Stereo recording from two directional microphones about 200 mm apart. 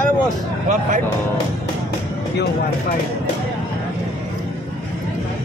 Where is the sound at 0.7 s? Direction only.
40° right (ahead or behind).